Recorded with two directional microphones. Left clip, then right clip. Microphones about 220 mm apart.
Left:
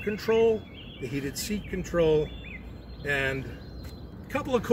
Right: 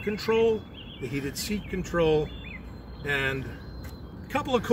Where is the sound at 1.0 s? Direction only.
5° right (ahead or behind).